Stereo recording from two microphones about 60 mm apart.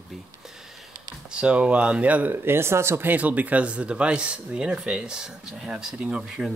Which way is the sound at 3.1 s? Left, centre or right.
Right.